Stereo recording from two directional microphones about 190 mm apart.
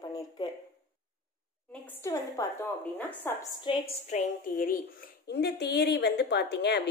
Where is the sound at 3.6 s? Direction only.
30° left (ahead or behind).